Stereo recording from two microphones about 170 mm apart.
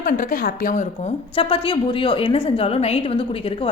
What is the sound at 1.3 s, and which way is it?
A woman's voice, 30° left (ahead or behind).